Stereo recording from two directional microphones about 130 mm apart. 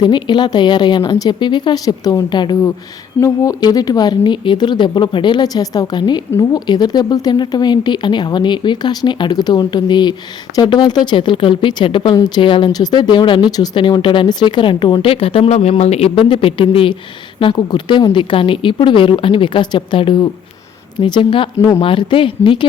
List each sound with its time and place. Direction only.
0.0 s a woman's voice: 35° left (ahead or behind)